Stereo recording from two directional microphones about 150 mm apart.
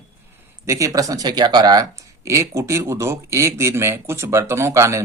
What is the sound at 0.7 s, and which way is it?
Speech, 20° right (ahead or behind).